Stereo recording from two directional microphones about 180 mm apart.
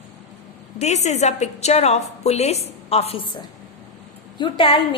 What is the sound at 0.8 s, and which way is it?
A woman's voice, 40° left (ahead or behind).